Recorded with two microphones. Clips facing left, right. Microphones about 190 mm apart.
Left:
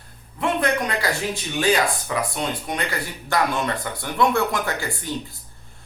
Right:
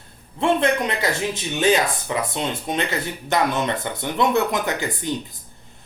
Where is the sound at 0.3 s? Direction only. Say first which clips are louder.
Right 3 dB; 25° right (ahead or behind).